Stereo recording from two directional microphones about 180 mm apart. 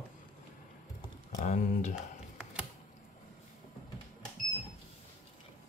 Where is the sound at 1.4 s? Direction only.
40° left (ahead or behind).